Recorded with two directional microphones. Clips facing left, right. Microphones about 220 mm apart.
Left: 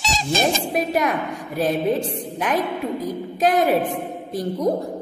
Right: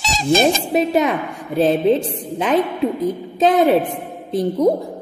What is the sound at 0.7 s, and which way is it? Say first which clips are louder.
A woman's voice: right 5 dB; 25° right (ahead or behind).